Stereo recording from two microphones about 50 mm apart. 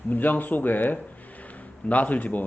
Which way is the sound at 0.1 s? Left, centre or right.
Left.